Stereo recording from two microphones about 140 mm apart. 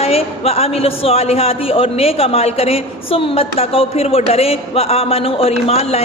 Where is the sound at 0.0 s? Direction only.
45° left (ahead or behind).